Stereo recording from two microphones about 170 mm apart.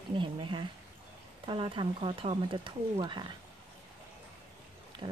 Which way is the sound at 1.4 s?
30° right (ahead or behind).